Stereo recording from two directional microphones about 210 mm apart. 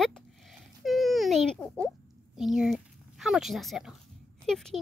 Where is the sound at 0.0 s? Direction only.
Centre (ahead or behind).